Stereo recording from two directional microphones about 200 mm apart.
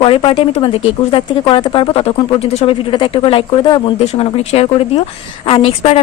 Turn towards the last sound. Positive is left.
turn(degrees=30)  # may be behind; listen again after turning